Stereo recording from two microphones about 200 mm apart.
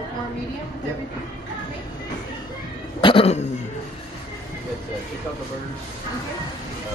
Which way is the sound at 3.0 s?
25° left (ahead or behind).